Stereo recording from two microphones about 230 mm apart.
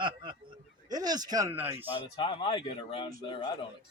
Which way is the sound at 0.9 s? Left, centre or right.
Centre.